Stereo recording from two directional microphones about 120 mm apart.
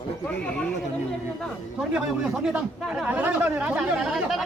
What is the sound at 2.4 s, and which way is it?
Speech, 5° right (ahead or behind).